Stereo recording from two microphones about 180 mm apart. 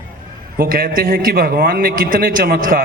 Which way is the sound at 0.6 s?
60° right (ahead or behind).